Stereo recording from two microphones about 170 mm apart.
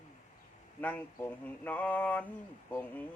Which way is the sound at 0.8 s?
10° left (ahead or behind).